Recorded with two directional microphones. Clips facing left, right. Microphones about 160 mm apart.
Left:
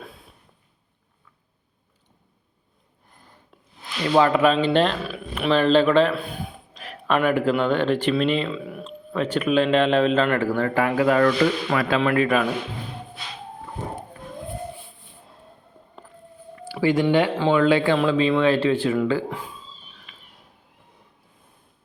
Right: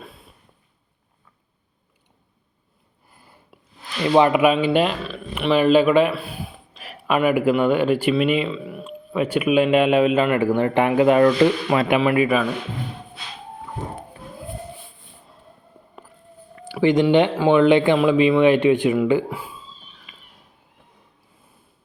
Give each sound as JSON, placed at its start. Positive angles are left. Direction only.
{"t": 0.0, "sound": "a sound", "side_deg": 0}
{"t": 3.1, "sound": "a sound", "side_deg": -10}
{"t": 4.1, "sound": "speech", "side_deg": -15}
{"t": 5.0, "sound": "a man's voice", "side_deg": 5}
{"t": 12.0, "sound": "a man's voice", "side_deg": -5}
{"t": 16.6, "sound": "speech", "side_deg": -20}